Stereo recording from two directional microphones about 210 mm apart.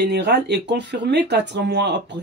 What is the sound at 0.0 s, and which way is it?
Speech, 50° right (ahead or behind).